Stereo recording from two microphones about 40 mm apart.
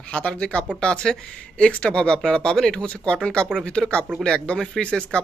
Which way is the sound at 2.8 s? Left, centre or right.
Left.